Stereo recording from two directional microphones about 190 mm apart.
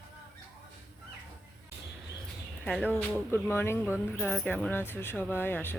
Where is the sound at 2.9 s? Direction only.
10° left (ahead or behind).